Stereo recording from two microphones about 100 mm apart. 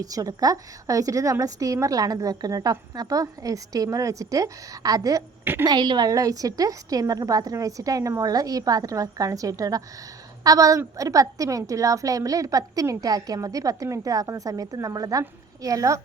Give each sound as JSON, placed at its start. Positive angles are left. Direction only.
{"t": 0.0, "sound": "a woman's voice", "side_deg": -35}